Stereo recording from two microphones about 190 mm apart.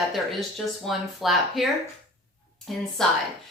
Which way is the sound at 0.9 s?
Centre (ahead or behind).